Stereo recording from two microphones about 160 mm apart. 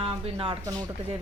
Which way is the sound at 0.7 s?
20° right (ahead or behind).